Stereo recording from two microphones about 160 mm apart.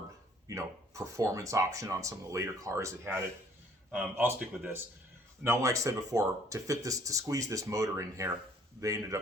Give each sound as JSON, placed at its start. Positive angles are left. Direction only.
{"t": 0.4, "sound": "speech", "side_deg": -20}